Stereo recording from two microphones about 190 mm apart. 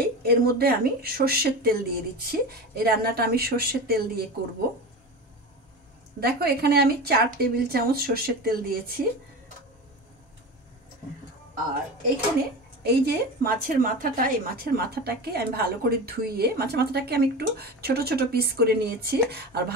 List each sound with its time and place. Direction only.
0.0 s speech: 55° right (ahead or behind)
6.1 s a woman's voice: 55° right (ahead or behind)
12.8 s a woman's voice: 60° right (ahead or behind)